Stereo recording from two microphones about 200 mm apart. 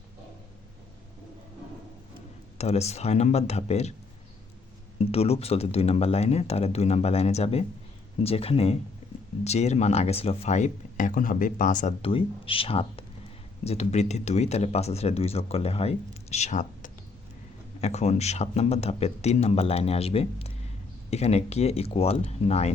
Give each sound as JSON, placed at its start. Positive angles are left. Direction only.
{"t": 2.6, "sound": "speech", "side_deg": 30}
{"t": 4.9, "sound": "speech", "side_deg": 30}